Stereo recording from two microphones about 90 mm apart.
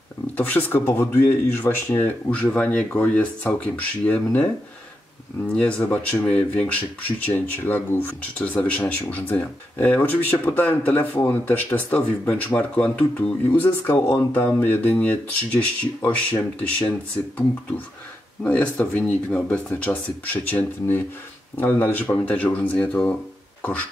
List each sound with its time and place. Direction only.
0.5 s speech: 20° left (ahead or behind)
5.5 s speech: 15° left (ahead or behind)
18.4 s speech: 15° left (ahead or behind)